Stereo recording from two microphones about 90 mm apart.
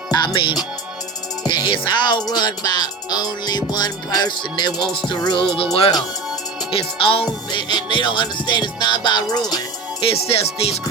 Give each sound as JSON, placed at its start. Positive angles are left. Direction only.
{"t": 0.1, "sound": "music", "side_deg": 65}
{"t": 7.7, "sound": "music", "side_deg": 55}
{"t": 10.0, "sound": "music", "side_deg": 90}